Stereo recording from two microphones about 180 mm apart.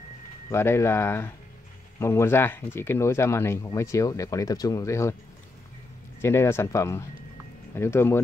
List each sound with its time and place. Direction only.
0.5 s speech: 15° left (ahead or behind)
6.2 s speech: 15° left (ahead or behind)